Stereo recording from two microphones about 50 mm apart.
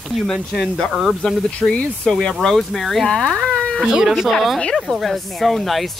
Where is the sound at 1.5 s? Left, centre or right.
Left; by 3.1 s centre.